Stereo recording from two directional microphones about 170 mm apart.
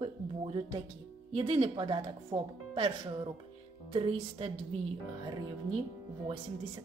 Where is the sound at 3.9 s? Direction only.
30° right (ahead or behind).